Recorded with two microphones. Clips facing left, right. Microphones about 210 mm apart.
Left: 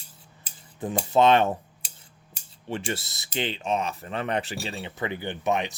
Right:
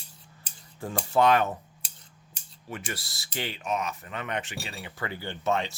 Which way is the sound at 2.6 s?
30° left (ahead or behind).